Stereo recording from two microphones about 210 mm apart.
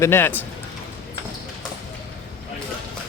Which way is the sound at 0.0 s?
10° left (ahead or behind).